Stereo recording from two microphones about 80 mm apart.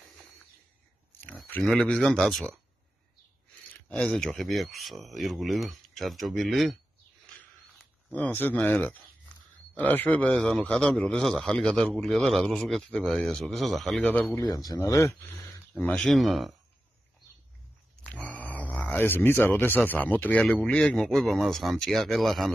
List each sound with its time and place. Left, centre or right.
1.1 s a sound: left
1.6 s speech: centre
3.9 s a man's voice: centre
8.1 s speech: centre
9.8 s a man's voice: centre
14.5 s speech: left
14.8 s speech: left
15.9 s a man's voice: centre
18.0 s a sound: centre
19.6 s speech: left
20.6 s a man's voice: centre